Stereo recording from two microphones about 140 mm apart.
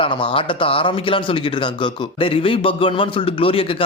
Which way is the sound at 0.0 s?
40° left (ahead or behind).